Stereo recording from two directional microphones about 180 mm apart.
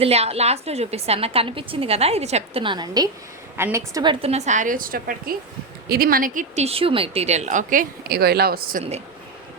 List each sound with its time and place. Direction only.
0.0 s a woman's voice: 35° right (ahead or behind)
6.7 s speech: 30° right (ahead or behind); by 8.8 s 55° right (ahead or behind)